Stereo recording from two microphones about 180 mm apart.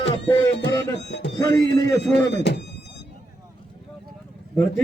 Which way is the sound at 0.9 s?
75° left (ahead or behind).